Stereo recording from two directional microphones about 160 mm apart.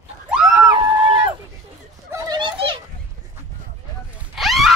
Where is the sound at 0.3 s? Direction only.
5° right (ahead or behind).